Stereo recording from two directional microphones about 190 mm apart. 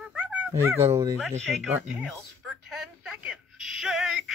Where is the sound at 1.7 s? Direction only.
10° right (ahead or behind).